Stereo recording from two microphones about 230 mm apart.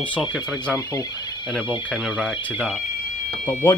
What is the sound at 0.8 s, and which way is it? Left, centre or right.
Speech, centre.